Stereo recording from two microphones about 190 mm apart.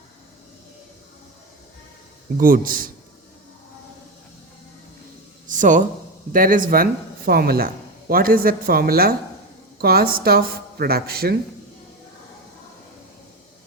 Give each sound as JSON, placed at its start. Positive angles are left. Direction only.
{"t": 2.4, "sound": "speech", "side_deg": -45}
{"t": 5.5, "sound": "a sound", "side_deg": -40}
{"t": 6.3, "sound": "speech", "side_deg": -45}